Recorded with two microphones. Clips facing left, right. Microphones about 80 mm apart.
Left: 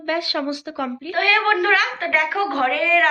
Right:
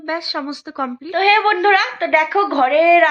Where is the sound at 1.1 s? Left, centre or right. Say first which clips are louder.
Right 5 dB; centre.